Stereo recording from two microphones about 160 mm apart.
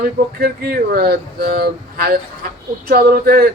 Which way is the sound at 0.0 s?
70° right (ahead or behind).